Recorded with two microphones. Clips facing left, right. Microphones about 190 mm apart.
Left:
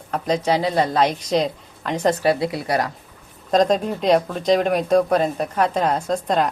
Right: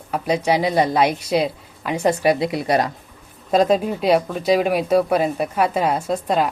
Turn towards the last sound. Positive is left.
turn(degrees=-5)  # may be behind; listen again after turning